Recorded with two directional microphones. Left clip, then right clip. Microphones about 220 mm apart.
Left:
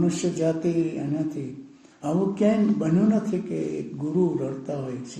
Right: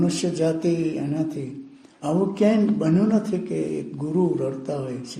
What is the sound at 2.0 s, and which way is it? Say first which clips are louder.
Speech: right 2 dB; 35° right (ahead or behind).